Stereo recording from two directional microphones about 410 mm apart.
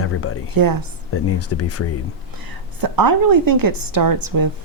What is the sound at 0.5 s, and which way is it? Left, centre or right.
Speech, right.